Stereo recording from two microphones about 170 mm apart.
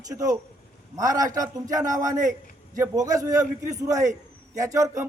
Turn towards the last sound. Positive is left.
turn(degrees=-20)  # may be behind; listen again after turning